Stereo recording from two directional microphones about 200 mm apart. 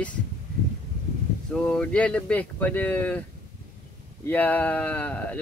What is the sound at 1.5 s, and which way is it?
Speech, 5° left (ahead or behind).